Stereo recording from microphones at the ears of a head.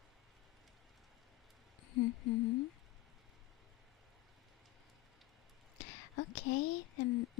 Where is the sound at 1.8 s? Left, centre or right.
Left.